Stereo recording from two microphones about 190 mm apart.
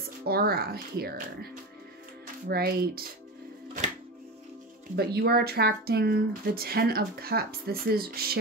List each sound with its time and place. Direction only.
0.3 s speech: 55° right (ahead or behind)
4.9 s speech: 55° right (ahead or behind)